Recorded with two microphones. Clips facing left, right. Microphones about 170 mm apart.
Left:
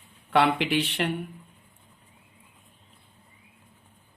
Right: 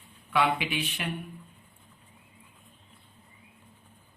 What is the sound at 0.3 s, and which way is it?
Speech, 70° left (ahead or behind).